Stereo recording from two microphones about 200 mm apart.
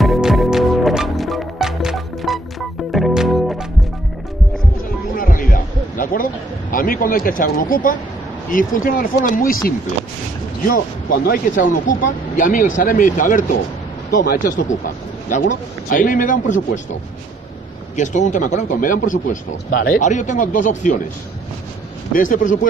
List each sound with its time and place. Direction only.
0.0 s music: centre (ahead or behind)
5.1 s a sound: 45° left (ahead or behind)
6.7 s speech: 45° left (ahead or behind)
17.9 s speech: 35° left (ahead or behind)
22.1 s speech: 40° left (ahead or behind)